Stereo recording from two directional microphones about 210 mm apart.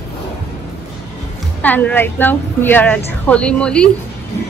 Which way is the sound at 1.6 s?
5° left (ahead or behind).